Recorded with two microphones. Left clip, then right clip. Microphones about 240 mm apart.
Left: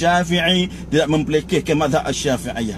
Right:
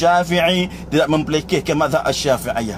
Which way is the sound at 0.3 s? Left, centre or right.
Right.